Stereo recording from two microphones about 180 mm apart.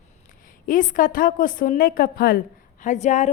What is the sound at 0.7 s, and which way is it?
A woman's voice, 45° left (ahead or behind).